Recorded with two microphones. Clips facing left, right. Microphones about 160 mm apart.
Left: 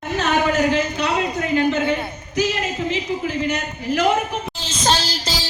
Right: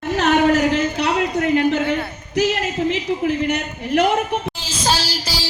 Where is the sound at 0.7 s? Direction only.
75° right (ahead or behind).